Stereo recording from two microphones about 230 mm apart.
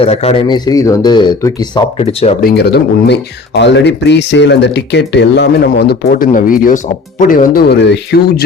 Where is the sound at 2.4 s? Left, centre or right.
Left.